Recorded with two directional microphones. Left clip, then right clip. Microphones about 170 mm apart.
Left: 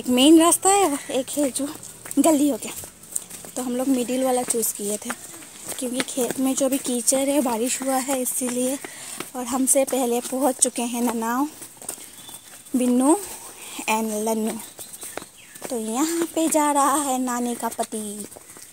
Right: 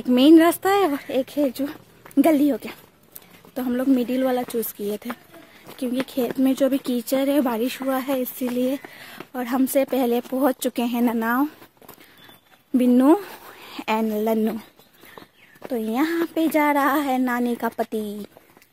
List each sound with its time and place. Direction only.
0.1 s speech: 15° right (ahead or behind)
6.0 s speech: 25° right (ahead or behind)
12.7 s speech: 30° right (ahead or behind)
13.7 s a woman's voice: 20° right (ahead or behind)
15.7 s speech: 25° right (ahead or behind)
17.6 s speech: 50° right (ahead or behind)